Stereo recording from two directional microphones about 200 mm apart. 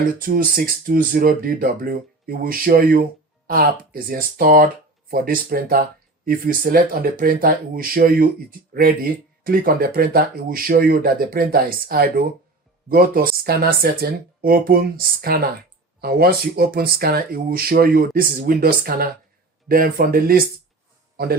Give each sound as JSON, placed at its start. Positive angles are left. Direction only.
{"t": 0.2, "sound": "speech", "side_deg": -45}